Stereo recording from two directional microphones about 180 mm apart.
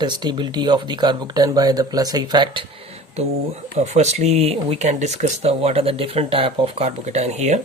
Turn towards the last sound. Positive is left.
turn(degrees=-40)  # may be behind; listen again after turning